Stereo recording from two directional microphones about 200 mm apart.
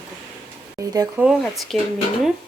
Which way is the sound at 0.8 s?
15° right (ahead or behind).